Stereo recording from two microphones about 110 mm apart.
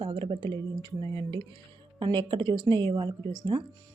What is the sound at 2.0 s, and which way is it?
A woman's voice, 45° right (ahead or behind).